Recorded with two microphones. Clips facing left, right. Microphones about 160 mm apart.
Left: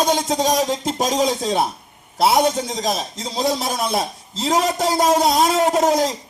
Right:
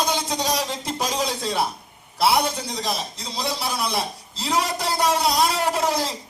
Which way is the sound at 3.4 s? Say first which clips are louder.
Left 5 dB; 45° left (ahead or behind).